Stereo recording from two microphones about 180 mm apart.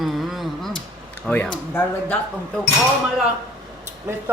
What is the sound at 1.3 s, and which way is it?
Speech, 5° left (ahead or behind).